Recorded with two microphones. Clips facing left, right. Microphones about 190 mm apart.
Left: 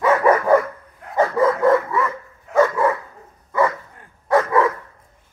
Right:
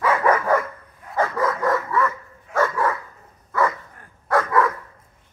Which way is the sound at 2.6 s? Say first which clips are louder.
Left 5 dB; 15° left (ahead or behind).